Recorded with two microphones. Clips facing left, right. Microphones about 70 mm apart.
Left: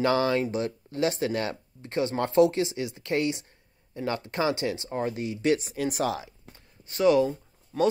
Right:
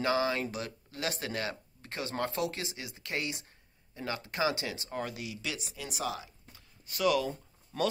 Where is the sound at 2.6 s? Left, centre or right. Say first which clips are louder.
Left 10 dB; right.